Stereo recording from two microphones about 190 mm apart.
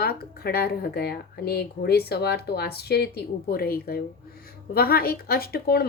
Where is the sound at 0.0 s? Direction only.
55° left (ahead or behind).